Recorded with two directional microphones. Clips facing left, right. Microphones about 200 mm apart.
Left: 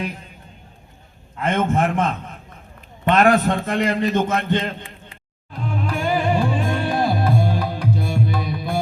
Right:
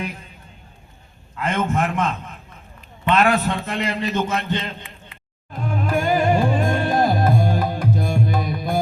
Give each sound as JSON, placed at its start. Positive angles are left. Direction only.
{"t": 1.6, "sound": "a man's voice", "side_deg": 35}
{"t": 3.0, "sound": "a man's voice", "side_deg": 50}
{"t": 5.5, "sound": "music", "side_deg": -45}